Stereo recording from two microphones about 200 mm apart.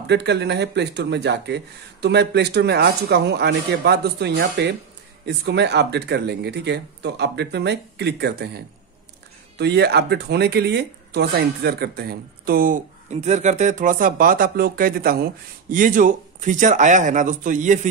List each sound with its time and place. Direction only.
0.0 s speech: 60° right (ahead or behind); by 17.7 s 40° right (ahead or behind)